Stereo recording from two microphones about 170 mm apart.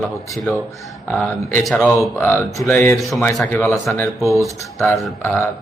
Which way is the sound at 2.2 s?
15° left (ahead or behind).